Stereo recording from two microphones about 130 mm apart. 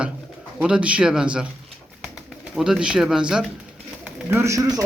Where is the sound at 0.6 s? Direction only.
10° right (ahead or behind).